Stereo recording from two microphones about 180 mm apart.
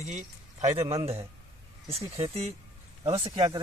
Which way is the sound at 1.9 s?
35° right (ahead or behind).